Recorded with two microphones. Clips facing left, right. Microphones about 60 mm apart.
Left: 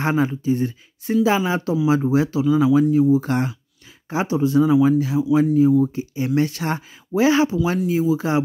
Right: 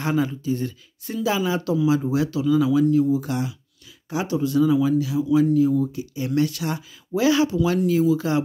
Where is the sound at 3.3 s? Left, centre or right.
Left.